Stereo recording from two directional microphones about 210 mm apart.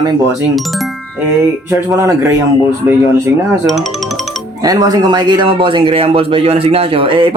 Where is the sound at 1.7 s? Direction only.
15° right (ahead or behind).